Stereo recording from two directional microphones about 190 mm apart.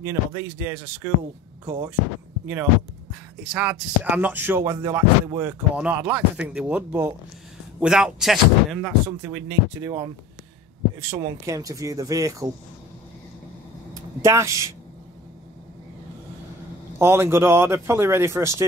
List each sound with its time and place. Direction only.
0.0 s speech: 15° right (ahead or behind)
3.5 s speech: 10° right (ahead or behind)
9.5 s speech: 15° right (ahead or behind)
14.2 s speech: 15° right (ahead or behind)
17.0 s speech: 15° right (ahead or behind)